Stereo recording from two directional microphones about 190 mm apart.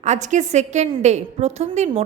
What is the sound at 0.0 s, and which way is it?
A woman's voice, 40° right (ahead or behind).